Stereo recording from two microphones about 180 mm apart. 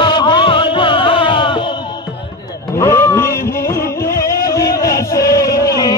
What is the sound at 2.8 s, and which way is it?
Music, 15° left (ahead or behind).